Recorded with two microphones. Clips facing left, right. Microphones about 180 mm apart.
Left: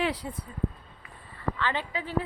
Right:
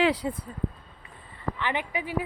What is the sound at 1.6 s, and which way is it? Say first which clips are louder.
Speech: right 2 dB; 15° right (ahead or behind).